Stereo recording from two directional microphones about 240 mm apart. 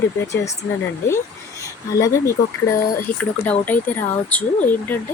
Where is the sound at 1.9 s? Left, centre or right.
Centre.